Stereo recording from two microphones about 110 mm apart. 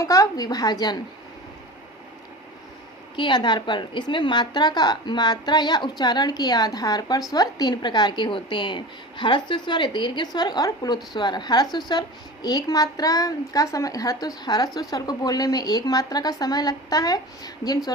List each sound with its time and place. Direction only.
0.0 s a woman's voice: 30° left (ahead or behind)
3.2 s a woman's voice: 45° left (ahead or behind)